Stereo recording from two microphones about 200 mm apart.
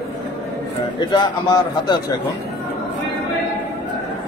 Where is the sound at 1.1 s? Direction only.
20° left (ahead or behind).